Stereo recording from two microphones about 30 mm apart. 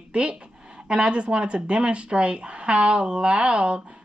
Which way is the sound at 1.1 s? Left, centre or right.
Right.